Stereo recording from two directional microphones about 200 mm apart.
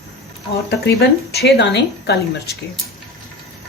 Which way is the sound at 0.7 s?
55° left (ahead or behind).